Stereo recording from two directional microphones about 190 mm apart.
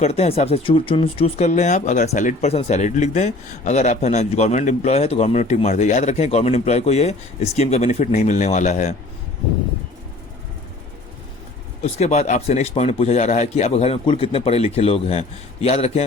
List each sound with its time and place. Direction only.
0.0 s speech: 35° left (ahead or behind)
11.8 s speech: 35° left (ahead or behind)